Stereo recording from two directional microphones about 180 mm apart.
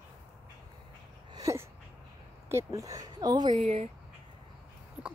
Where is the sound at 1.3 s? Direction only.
15° right (ahead or behind).